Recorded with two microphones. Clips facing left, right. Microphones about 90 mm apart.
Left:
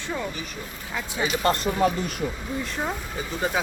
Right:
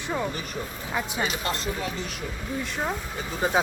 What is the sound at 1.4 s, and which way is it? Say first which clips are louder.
Speech: left 8 dB; 55° left (ahead or behind).